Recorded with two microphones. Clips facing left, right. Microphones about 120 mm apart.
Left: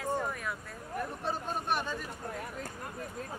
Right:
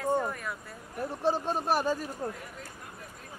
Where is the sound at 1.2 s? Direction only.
30° right (ahead or behind).